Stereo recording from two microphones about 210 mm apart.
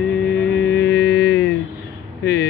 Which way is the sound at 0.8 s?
55° left (ahead or behind).